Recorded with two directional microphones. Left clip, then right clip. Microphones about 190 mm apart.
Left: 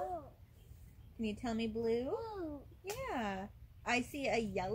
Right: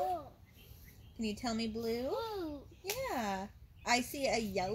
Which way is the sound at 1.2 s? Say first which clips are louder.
Right 2 dB; 40° right (ahead or behind).